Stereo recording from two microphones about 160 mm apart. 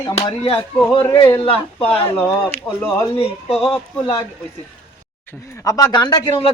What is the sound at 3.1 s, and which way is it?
Speech, 40° left (ahead or behind).